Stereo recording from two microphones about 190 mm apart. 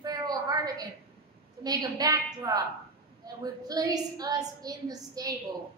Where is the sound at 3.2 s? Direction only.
20° right (ahead or behind).